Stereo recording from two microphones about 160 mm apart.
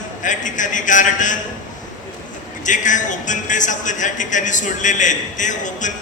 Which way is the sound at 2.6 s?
50° left (ahead or behind).